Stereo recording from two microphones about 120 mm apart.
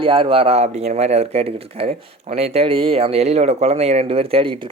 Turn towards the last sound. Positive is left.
turn(degrees=-50)  # may be behind; listen again after turning